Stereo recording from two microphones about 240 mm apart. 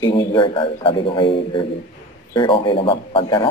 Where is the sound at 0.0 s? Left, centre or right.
Centre.